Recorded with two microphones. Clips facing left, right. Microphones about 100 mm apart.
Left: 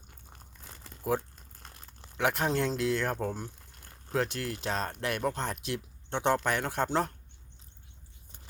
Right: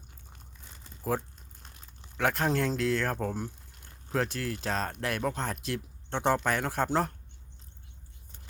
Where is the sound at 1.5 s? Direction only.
45° left (ahead or behind).